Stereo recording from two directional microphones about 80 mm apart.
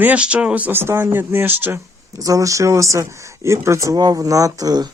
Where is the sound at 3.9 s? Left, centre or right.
Right.